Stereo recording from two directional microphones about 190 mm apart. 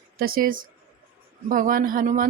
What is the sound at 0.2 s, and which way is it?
Speech, 50° right (ahead or behind).